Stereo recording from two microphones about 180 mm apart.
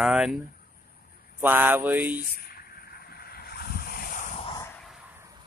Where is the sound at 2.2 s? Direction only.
55° left (ahead or behind).